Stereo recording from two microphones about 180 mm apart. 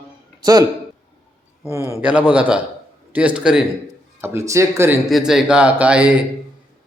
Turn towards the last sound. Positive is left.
turn(degrees=-5)  # may be behind; listen again after turning